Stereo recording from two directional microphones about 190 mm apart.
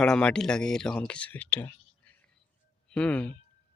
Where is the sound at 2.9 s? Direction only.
5° left (ahead or behind).